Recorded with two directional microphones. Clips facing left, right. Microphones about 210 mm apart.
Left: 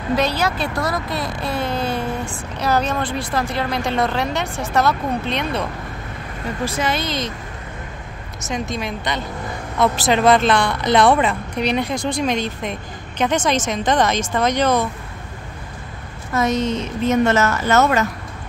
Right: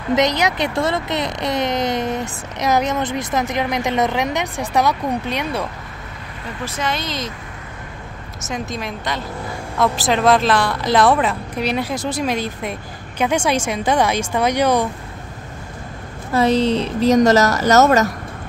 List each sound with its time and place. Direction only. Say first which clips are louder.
0.1 s speech: right 2 dB; 15° right (ahead or behind)
6.6 s a woman's voice: left 2 dB; 5° left (ahead or behind)
8.5 s a woman's voice: left 1 dB; 5° right (ahead or behind)
16.3 s speech: right 4 dB; 30° right (ahead or behind)